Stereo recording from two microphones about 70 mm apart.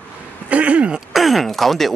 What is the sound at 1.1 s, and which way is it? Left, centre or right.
Speech, centre.